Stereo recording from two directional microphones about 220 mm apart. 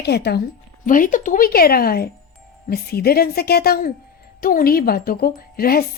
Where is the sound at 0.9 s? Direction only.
35° left (ahead or behind).